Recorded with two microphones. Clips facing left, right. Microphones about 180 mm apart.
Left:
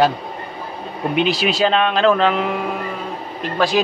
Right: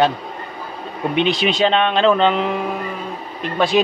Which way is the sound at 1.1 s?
5° left (ahead or behind).